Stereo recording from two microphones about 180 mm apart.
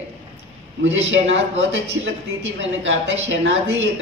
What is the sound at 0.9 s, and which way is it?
A man's voice, 90° right.